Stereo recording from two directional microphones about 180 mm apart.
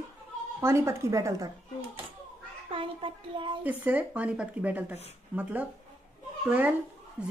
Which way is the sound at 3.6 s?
10° right (ahead or behind).